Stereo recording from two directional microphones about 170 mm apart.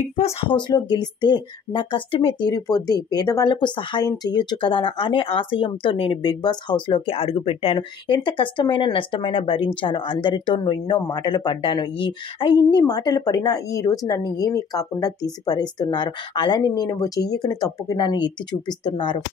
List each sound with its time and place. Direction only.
0.1 s speech: 35° left (ahead or behind)